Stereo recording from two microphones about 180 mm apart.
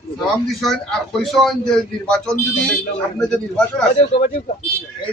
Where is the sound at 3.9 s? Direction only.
35° left (ahead or behind).